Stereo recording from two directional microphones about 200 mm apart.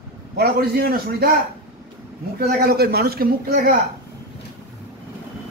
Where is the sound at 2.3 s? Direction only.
50° right (ahead or behind).